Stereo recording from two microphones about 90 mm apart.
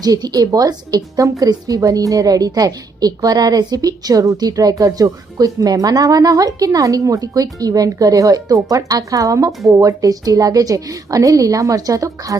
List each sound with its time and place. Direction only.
0.0 s a woman's voice: 45° right (ahead or behind)
9.5 s speech: centre (ahead or behind)
9.7 s speech: 40° right (ahead or behind)